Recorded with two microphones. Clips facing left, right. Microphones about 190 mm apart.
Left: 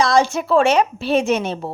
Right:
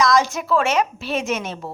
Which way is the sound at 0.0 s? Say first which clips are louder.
Left 2 dB; 30° left (ahead or behind).